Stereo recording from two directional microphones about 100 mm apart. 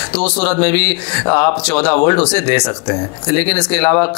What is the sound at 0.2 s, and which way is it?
Speech, 15° left (ahead or behind).